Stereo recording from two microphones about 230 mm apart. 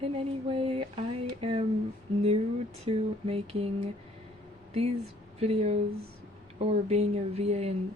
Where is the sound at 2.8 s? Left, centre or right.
Right.